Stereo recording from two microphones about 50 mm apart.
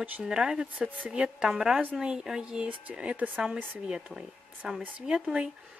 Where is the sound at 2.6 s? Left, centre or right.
Right.